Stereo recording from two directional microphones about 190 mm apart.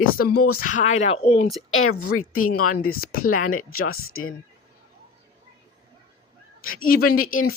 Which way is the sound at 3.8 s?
90° left.